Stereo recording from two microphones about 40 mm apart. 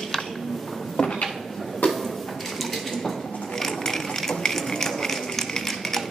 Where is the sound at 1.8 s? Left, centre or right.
Left.